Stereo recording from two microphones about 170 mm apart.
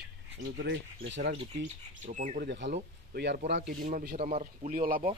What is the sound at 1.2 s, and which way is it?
Speech, 40° right (ahead or behind).